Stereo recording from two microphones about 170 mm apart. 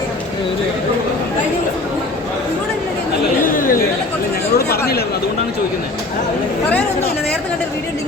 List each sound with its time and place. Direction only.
3.4 s chatter: 55° left (ahead or behind)
4.5 s speech: 70° left (ahead or behind)